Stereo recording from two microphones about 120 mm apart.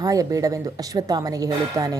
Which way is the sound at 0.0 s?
30° right (ahead or behind).